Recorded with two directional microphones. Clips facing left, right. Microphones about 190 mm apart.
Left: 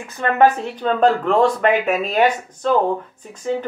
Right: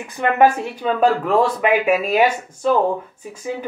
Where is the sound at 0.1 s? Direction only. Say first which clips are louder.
Even; 15° right (ahead or behind).